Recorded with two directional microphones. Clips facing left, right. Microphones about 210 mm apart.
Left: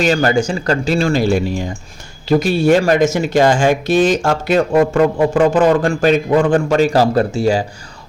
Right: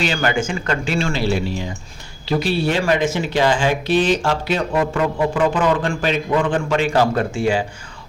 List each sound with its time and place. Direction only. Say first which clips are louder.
0.0 s speech: left 6 dB; 40° left (ahead or behind)